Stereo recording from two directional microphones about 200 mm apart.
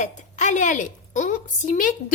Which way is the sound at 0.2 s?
35° left (ahead or behind).